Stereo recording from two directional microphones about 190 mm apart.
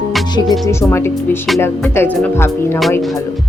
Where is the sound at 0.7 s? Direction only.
15° left (ahead or behind).